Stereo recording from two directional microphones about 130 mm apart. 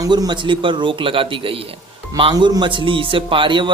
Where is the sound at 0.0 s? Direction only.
30° right (ahead or behind).